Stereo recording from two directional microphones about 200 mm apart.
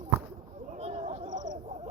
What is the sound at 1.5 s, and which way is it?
Gargling, 35° right (ahead or behind).